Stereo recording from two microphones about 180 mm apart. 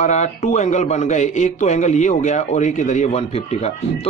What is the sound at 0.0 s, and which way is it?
Speech, 40° left (ahead or behind).